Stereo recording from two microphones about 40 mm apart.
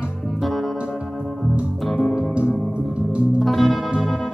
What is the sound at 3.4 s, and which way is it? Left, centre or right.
Music, centre.